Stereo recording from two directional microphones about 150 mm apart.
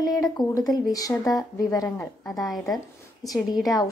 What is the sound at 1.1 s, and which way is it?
Speech, 15° left (ahead or behind).